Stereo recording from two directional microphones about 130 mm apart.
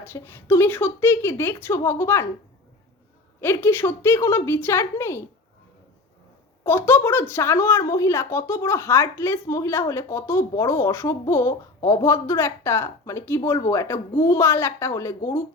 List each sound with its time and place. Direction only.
0.0 s speech: 15° left (ahead or behind)
3.4 s speech: 20° left (ahead or behind)
6.7 s speech: 15° left (ahead or behind)